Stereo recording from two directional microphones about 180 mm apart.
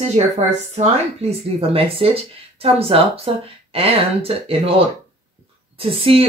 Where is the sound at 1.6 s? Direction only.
30° right (ahead or behind).